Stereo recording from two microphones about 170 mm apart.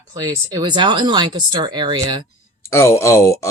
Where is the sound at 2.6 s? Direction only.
15° left (ahead or behind).